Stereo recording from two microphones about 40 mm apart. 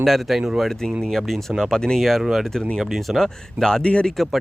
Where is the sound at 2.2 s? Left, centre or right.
Centre.